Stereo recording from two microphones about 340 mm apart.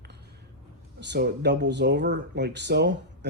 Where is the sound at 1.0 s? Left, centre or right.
Right.